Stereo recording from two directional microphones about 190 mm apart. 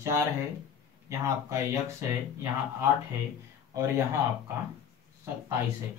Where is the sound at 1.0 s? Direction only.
15° right (ahead or behind).